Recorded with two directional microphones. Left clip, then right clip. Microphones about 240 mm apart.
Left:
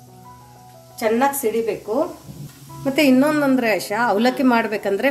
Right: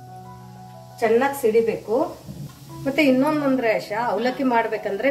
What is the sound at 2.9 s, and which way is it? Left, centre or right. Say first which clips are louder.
A woman's voice: left 3 dB; left.